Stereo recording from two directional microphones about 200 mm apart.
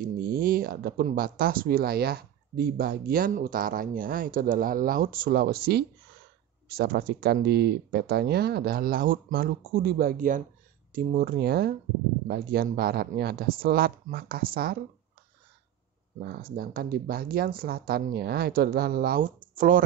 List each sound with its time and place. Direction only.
0.0 s speech: 45° right (ahead or behind)
16.3 s speech: 50° right (ahead or behind)